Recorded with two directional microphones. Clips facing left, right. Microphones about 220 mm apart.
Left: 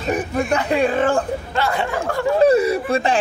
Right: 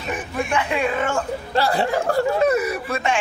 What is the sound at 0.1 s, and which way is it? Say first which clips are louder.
Speech: left 4 dB; 40° left (ahead or behind).